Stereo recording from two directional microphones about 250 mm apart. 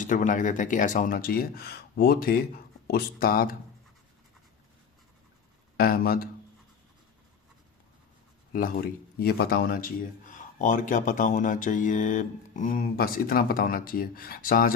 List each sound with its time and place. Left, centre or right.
0.0 s speech: left
5.7 s speech: left
8.5 s speech: left